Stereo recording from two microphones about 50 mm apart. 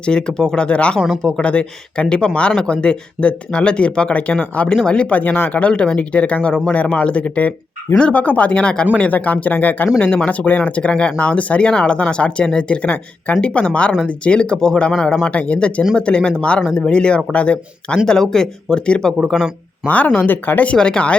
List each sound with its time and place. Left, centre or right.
0.0 s speech: centre
5.1 s speech: left
9.1 s speech: left; by 19.1 s centre
19.9 s speech: left
20.7 s speech: centre